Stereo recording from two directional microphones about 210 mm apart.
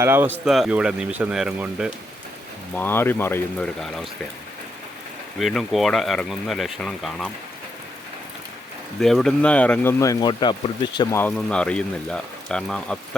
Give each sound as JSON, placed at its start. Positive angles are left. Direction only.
{"t": 0.0, "sound": "speech", "side_deg": -10}
{"t": 2.7, "sound": "speech", "side_deg": 10}
{"t": 5.4, "sound": "speech", "side_deg": 0}
{"t": 9.0, "sound": "speech", "side_deg": 0}
{"t": 11.2, "sound": "speech", "side_deg": 5}